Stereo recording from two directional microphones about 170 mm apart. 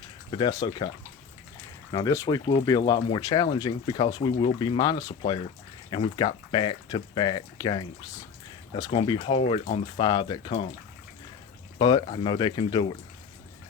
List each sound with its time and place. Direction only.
0.3 s speech: 25° left (ahead or behind)
1.9 s speech: 20° left (ahead or behind)
11.8 s speech: 25° left (ahead or behind)